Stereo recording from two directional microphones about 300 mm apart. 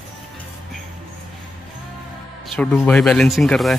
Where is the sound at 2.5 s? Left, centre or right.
Centre.